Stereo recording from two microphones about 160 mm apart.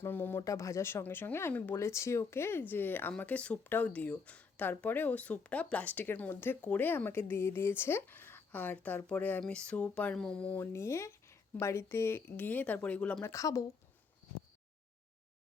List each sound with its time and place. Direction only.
0.0 s speech: 15° left (ahead or behind)
13.3 s speech: 20° left (ahead or behind)